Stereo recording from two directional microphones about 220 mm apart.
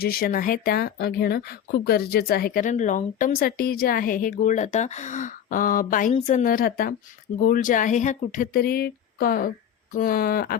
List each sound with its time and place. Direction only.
0.0 s speech: 40° left (ahead or behind)